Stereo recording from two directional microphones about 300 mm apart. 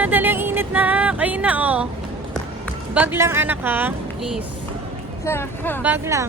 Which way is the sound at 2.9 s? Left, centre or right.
Centre.